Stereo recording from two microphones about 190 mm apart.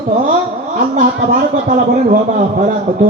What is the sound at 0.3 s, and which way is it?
A man's voice, 45° right (ahead or behind).